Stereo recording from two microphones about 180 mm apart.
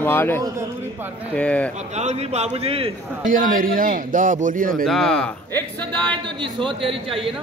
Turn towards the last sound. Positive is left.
turn(degrees=-30)  # may be behind; listen again after turning